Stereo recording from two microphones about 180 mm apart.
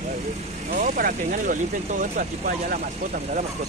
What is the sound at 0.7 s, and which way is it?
Speech, 50° right (ahead or behind).